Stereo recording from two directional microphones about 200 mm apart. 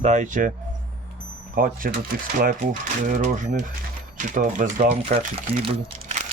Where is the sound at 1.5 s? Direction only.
45° right (ahead or behind).